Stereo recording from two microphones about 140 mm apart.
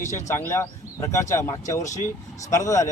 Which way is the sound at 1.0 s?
20° left (ahead or behind).